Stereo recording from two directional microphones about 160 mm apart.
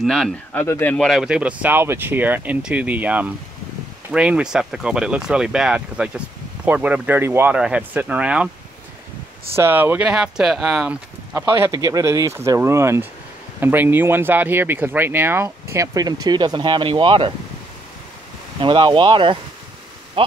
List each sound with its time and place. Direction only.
0.0 s speech: centre (ahead or behind)
9.6 s speech: 10° right (ahead or behind)
11.5 s speech: 15° right (ahead or behind); by 17.3 s 30° right (ahead or behind)
18.6 s speech: 30° right (ahead or behind)